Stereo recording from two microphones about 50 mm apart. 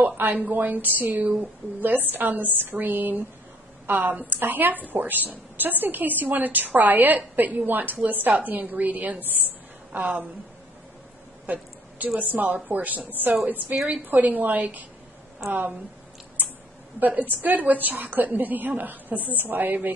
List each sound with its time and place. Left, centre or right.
0.0 s a woman's voice: right
11.4 s a sound: right
12.2 s a woman's voice: right
17.0 s a woman's voice: right